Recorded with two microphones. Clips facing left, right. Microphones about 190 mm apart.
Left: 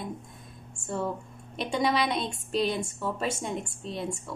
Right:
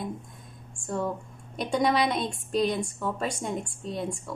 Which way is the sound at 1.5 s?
Centre (ahead or behind).